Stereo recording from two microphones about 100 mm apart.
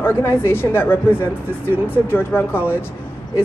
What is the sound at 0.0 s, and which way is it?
Speech, 25° left (ahead or behind).